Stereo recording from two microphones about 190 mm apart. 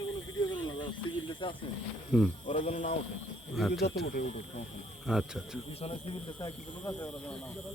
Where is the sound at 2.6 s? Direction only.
35° left (ahead or behind).